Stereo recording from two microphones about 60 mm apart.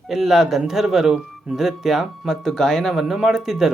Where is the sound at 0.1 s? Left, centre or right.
Centre.